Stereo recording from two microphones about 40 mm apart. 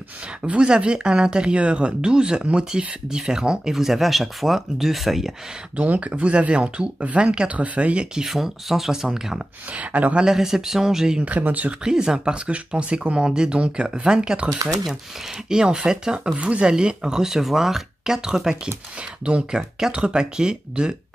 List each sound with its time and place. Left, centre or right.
0.6 s speech: right; by 5.3 s centre
5.8 s speech: right
8.0 s speech: centre
8.3 s speech: centre
9.7 s speech: right
10.2 s speech: centre
11.4 s speech: right
11.8 s speech: centre
16.3 s speech: right